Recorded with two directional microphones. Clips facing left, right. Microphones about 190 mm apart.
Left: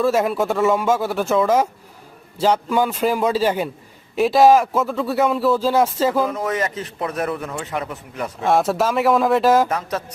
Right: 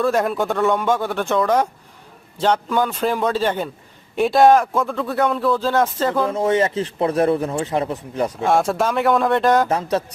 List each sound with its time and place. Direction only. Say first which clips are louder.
0.0 s a man's voice: left 1 dB; 5° left (ahead or behind)
6.3 s speech: right 5 dB; 30° right (ahead or behind)
8.4 s speech: left 2 dB; centre (ahead or behind)
9.6 s speech: right 4 dB; 30° right (ahead or behind)